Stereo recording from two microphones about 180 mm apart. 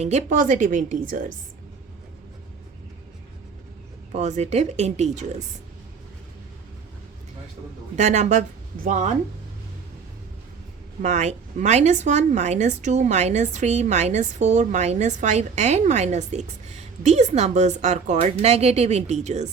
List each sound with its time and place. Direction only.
0.0 s a woman's voice: 40° right (ahead or behind)
4.1 s a woman's voice: 40° right (ahead or behind)
7.9 s a woman's voice: 40° right (ahead or behind)
11.0 s a woman's voice: 40° right (ahead or behind)